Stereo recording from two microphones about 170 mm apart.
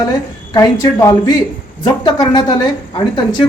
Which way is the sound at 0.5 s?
20° left (ahead or behind).